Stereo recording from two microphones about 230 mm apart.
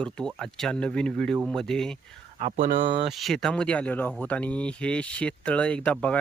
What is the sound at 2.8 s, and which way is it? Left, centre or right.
Speech, right.